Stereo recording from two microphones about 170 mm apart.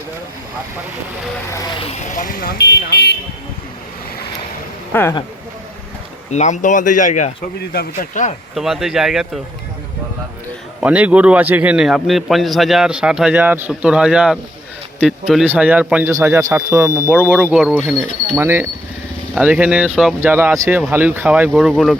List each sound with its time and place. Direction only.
1.8 s speech: 40° left (ahead or behind); by 3.2 s 70° left (ahead or behind)
4.9 s speech: 10° left (ahead or behind)
6.3 s speech: 45° left (ahead or behind)
7.6 s speech: 65° left (ahead or behind)
8.5 s a man's voice: centre (ahead or behind)
10.8 s a man's voice: 10° right (ahead or behind)
15.4 s a man's voice: 10° right (ahead or behind)
18.3 s speech: 15° right (ahead or behind)
21.5 s a man's voice: centre (ahead or behind)